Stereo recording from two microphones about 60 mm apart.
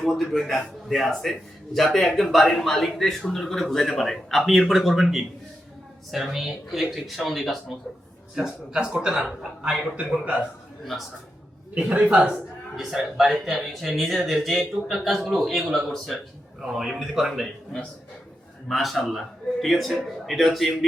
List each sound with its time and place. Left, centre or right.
0.1 s a man's voice: centre
10.0 s a man's voice: centre
11.7 s a man's voice: right
12.7 s a man's voice: centre
18.7 s a man's voice: centre